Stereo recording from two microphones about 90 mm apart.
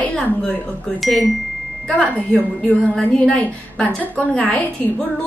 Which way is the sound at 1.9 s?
15° left (ahead or behind).